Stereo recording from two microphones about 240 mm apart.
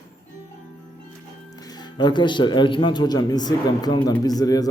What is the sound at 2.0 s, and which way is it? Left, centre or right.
A man's voice, centre.